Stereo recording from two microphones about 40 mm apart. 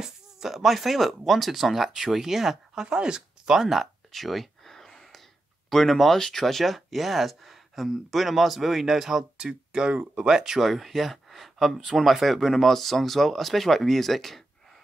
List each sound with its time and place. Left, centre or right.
0.0 s speech: centre
10.6 s speech: centre